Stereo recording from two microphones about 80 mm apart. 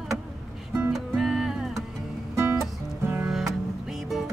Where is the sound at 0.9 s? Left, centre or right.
Centre.